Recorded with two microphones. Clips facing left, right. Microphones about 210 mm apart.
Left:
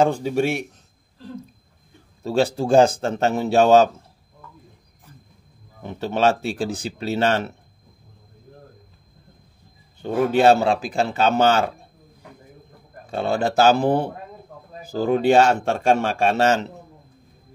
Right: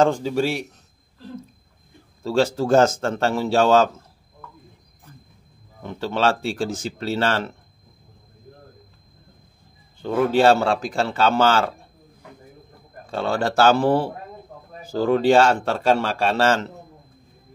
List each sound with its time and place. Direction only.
0.4 s a man's voice: 50° left (ahead or behind)
2.2 s speech: 15° left (ahead or behind)
5.8 s speech: 15° left (ahead or behind)
10.0 s speech: 20° left (ahead or behind)
13.1 s speech: 15° left (ahead or behind)
15.8 s a man's voice: 50° left (ahead or behind)
16.3 s speech: 20° left (ahead or behind)